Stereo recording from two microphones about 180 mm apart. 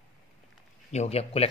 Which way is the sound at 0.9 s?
35° left (ahead or behind).